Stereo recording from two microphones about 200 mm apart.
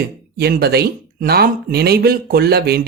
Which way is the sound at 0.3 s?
50° right (ahead or behind).